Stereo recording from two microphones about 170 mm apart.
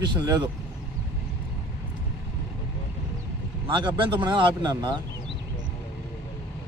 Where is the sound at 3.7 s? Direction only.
30° right (ahead or behind).